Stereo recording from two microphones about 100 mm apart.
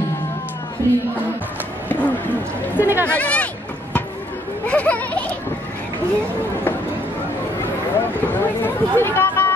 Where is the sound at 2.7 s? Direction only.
20° right (ahead or behind).